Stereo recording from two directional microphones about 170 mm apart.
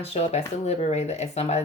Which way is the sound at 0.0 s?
40° left (ahead or behind).